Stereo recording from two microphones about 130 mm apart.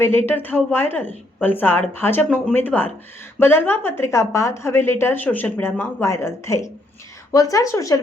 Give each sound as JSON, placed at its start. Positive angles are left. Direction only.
{"t": 0.0, "sound": "a woman's voice", "side_deg": 20}